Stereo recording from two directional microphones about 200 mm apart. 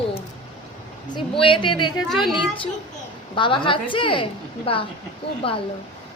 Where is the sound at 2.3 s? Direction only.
25° left (ahead or behind).